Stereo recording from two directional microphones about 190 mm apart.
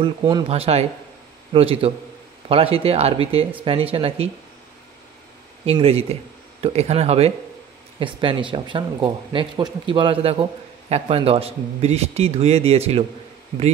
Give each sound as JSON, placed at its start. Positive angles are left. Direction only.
{"t": 0.0, "sound": "speech", "side_deg": -30}
{"t": 5.7, "sound": "speech", "side_deg": -30}